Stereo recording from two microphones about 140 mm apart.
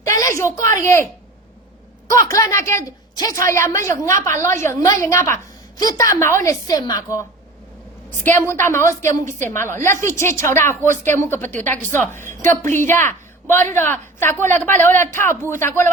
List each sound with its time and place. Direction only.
0.0 s a sound: 20° left (ahead or behind)
0.7 s a woman's voice: 20° left (ahead or behind)
2.0 s a woman's voice: 25° left (ahead or behind)
11.8 s a woman's voice: 60° right (ahead or behind)
12.1 s a woman's voice: 20° left (ahead or behind)